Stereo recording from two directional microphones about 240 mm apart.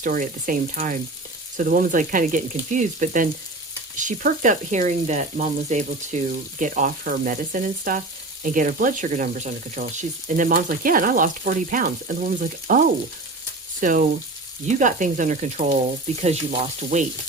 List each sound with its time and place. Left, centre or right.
0.0 s speech: right
13.8 s speech: right
16.2 s frying: right